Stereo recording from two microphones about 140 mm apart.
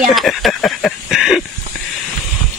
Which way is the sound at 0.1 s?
Centre (ahead or behind).